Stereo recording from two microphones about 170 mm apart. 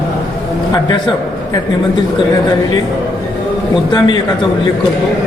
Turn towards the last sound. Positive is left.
turn(degrees=25)  # may be behind; listen again after turning